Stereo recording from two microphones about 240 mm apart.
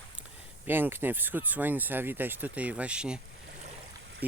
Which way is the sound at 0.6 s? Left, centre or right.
Centre.